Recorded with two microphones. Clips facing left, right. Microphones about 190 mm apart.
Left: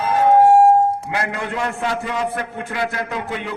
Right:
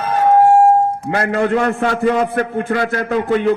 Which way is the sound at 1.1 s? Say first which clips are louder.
Right 8 dB; 50° right (ahead or behind).